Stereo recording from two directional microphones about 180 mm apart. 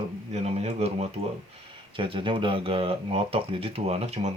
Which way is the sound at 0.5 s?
35° right (ahead or behind).